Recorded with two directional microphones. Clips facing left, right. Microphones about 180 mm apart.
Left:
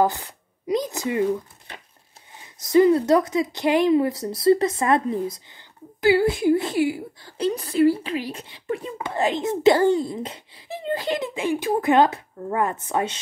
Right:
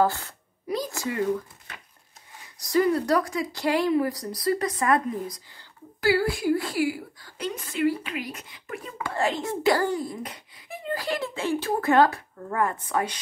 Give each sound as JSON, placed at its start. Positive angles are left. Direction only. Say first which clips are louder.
{"t": 0.0, "sound": "a woman's voice", "louder": "left 2 dB", "side_deg": 15}